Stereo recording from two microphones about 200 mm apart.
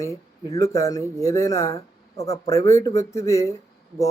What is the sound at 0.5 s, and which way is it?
Speech, 15° left (ahead or behind).